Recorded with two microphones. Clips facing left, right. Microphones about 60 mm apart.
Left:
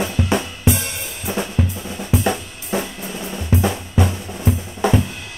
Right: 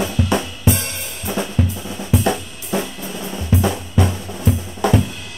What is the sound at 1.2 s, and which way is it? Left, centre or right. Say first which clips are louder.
Drum kit: right 1 dB; centre.